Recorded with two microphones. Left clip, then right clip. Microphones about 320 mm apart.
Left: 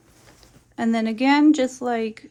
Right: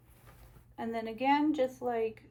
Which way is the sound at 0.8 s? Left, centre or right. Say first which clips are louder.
Left 12 dB; left.